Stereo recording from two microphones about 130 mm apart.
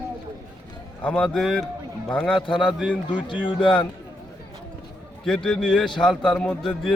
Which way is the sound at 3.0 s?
35° left (ahead or behind).